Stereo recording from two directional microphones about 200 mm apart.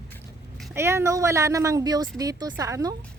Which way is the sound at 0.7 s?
15° right (ahead or behind).